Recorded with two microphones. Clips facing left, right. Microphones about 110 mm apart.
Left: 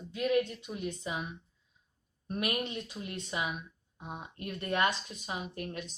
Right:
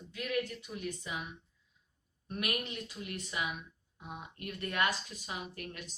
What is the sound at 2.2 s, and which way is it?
A woman's voice, 25° left (ahead or behind).